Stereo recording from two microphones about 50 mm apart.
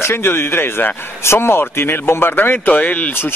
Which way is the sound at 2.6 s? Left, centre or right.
Left.